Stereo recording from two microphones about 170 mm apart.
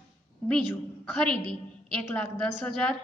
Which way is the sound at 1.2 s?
5° left (ahead or behind).